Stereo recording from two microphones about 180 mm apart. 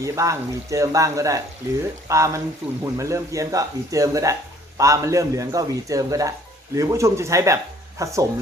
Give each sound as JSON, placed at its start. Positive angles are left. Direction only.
{"t": 0.0, "sound": "speech", "side_deg": -15}